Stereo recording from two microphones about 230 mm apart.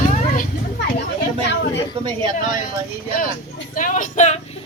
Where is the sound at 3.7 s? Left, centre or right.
Left.